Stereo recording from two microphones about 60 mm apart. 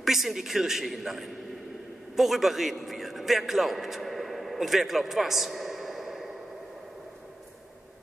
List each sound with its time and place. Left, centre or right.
0.0 s a man's voice: centre